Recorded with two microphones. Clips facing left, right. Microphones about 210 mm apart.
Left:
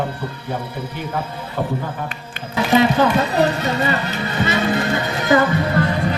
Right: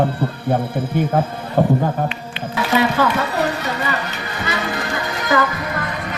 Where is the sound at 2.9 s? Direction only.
20° left (ahead or behind).